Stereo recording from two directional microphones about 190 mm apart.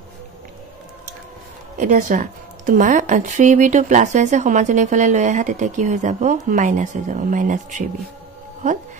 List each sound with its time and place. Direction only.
1.8 s a woman's voice: 40° right (ahead or behind)